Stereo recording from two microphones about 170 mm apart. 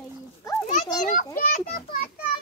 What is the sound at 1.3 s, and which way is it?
Speech, 55° left (ahead or behind).